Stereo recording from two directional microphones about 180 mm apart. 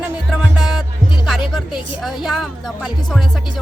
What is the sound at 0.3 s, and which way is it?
Music, centre (ahead or behind).